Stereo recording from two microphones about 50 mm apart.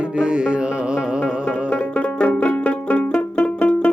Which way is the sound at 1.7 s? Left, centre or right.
Left.